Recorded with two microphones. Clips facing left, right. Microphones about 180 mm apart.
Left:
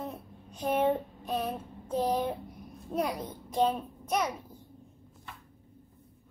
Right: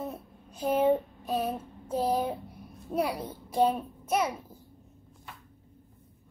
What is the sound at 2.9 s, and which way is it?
A child's voice, 10° right (ahead or behind).